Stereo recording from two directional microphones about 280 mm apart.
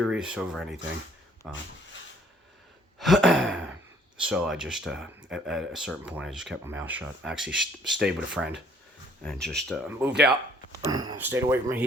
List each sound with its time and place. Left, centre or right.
0.0 s speech: centre
3.0 s speech: centre
10.8 s speech: centre